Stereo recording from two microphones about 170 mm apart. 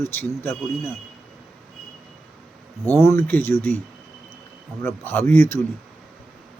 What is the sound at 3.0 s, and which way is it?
Speech, 15° left (ahead or behind).